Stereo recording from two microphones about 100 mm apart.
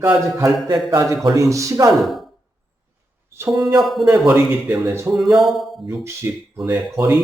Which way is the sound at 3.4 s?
30° right (ahead or behind).